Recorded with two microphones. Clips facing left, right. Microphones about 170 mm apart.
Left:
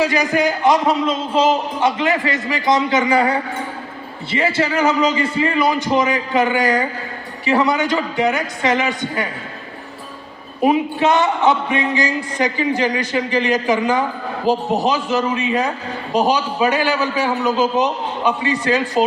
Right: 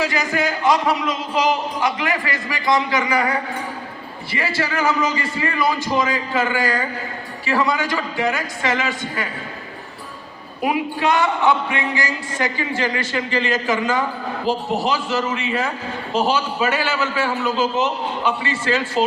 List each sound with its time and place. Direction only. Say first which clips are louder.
0.0 s a man's voice: left 4 dB; 20° left (ahead or behind)
10.6 s a man's voice: left 5 dB; 20° left (ahead or behind)